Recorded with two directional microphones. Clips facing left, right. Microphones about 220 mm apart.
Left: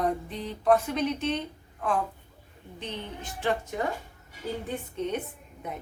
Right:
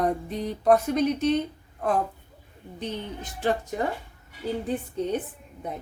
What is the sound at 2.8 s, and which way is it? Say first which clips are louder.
Speech: right 4 dB; 40° right (ahead or behind).